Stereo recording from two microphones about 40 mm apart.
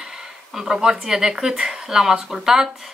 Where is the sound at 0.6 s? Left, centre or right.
Centre.